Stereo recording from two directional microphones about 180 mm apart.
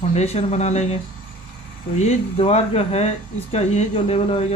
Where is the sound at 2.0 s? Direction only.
35° left (ahead or behind).